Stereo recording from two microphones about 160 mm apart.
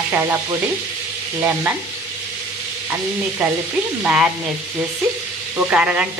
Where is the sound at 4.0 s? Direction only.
10° right (ahead or behind).